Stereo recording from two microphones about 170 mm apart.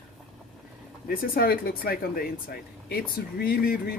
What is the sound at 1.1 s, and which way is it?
Speech, 60° left (ahead or behind).